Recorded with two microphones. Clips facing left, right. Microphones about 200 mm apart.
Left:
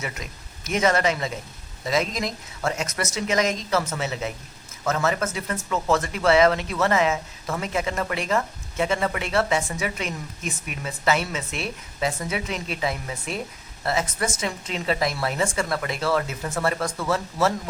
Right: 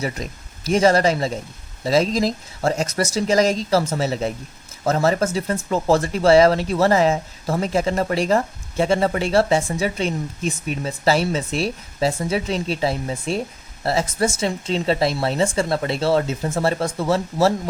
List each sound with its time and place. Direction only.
0.0 s speech: 35° right (ahead or behind)